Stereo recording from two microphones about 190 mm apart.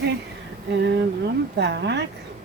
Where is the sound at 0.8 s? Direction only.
65° right (ahead or behind).